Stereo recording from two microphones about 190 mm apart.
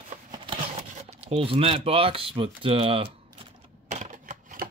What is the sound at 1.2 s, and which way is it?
Speech, 30° right (ahead or behind).